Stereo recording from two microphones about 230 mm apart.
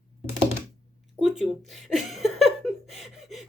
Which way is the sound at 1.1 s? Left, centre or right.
Centre.